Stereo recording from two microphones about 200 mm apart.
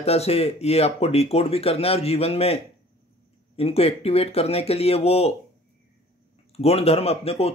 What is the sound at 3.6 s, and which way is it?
Speech, 30° left (ahead or behind).